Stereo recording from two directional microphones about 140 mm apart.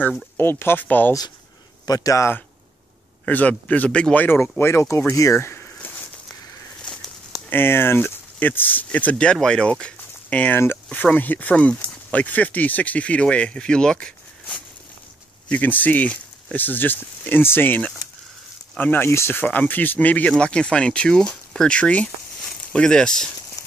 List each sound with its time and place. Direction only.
0.4 s speech: 15° left (ahead or behind)
1.9 s speech: 25° left (ahead or behind)
6.9 s bird: 5° left (ahead or behind)
7.5 s speech: 15° left (ahead or behind)
15.4 s speech: 10° left (ahead or behind)